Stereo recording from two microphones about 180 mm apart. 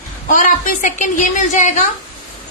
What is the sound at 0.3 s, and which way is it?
A woman's voice, 45° left (ahead or behind).